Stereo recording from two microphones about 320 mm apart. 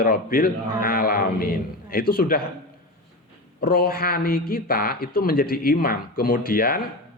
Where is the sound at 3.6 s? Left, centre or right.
Left.